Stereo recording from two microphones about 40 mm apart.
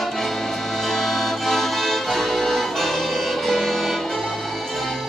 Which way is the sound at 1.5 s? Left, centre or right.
Centre.